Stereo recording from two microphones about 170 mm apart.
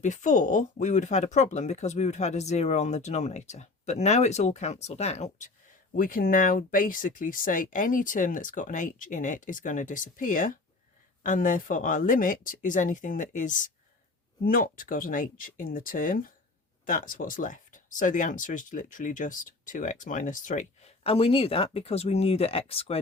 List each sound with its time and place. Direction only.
0.0 s speech: 45° left (ahead or behind)
6.0 s speech: 55° left (ahead or behind); by 23.0 s 35° left (ahead or behind)